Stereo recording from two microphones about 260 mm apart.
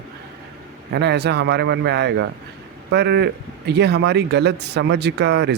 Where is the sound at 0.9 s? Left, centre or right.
Right.